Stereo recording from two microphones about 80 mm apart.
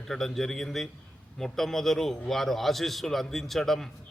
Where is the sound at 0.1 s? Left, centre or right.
Centre.